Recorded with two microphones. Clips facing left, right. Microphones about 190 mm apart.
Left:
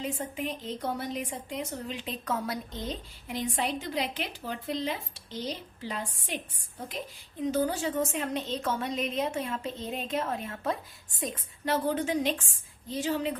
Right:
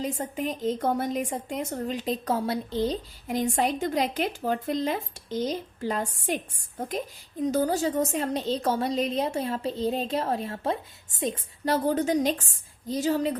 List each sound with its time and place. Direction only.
0.0 s a woman's voice: 40° right (ahead or behind)